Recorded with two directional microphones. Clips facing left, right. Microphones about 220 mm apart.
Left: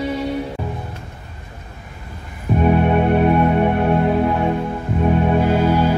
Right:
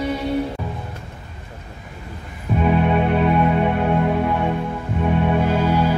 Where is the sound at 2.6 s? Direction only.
45° left (ahead or behind).